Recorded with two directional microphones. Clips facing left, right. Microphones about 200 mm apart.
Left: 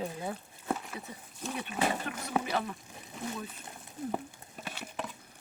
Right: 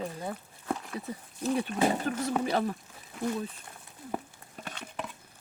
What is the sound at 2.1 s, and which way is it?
Speech, 40° right (ahead or behind).